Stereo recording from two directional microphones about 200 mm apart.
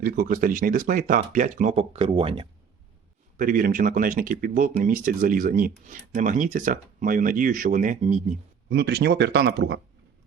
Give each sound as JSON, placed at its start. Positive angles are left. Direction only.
{"t": 0.0, "sound": "speech", "side_deg": -45}
{"t": 3.3, "sound": "speech", "side_deg": -45}
{"t": 8.7, "sound": "speech", "side_deg": -55}